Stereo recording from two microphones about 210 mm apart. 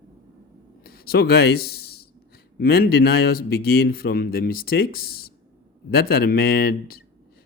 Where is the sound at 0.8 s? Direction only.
45° left (ahead or behind).